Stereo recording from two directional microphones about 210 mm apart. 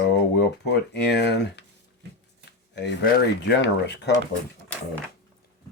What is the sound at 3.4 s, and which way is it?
Speech, 55° left (ahead or behind).